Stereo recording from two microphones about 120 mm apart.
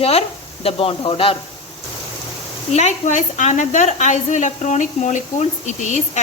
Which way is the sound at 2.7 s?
80° left.